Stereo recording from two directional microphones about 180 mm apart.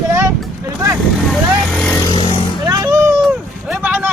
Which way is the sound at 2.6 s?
20° right (ahead or behind).